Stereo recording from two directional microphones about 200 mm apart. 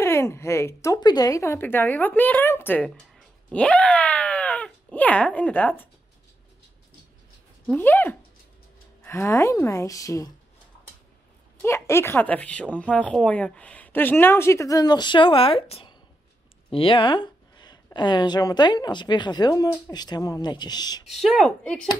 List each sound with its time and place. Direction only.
0.0 s speech: 10° left (ahead or behind)
7.6 s speech: 10° left (ahead or behind)
11.6 s speech: 15° left (ahead or behind)
16.7 s speech: 25° left (ahead or behind)
21.1 s speech: centre (ahead or behind)